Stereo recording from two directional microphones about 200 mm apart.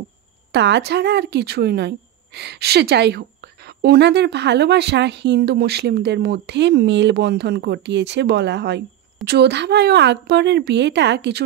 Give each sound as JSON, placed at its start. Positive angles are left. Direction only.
{"t": 0.5, "sound": "speech", "side_deg": -60}